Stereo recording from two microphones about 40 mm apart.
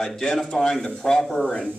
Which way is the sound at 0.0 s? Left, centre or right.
Centre.